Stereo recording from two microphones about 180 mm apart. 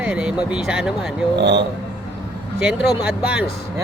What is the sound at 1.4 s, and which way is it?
Speech, 70° right (ahead or behind).